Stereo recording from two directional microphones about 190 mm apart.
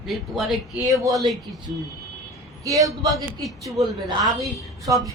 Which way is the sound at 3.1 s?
Centre (ahead or behind).